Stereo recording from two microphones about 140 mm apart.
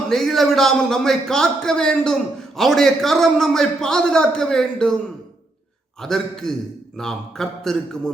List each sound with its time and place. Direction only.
0.1 s a man's voice: centre (ahead or behind)
6.0 s a man's voice: 5° left (ahead or behind)